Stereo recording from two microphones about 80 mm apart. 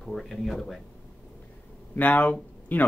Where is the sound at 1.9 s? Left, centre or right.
Left.